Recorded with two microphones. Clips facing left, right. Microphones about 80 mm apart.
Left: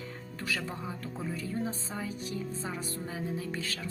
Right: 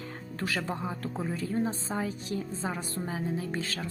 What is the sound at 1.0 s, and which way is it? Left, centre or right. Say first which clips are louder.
Speech: right 4 dB; right.